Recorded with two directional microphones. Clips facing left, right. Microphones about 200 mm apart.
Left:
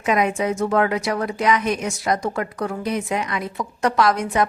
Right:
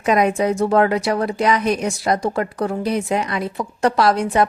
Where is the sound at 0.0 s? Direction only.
35° right (ahead or behind).